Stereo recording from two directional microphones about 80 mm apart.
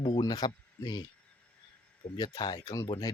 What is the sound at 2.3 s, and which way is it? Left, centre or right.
Speech, left.